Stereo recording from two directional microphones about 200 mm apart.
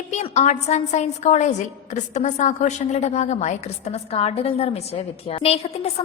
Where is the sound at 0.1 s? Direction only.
35° left (ahead or behind).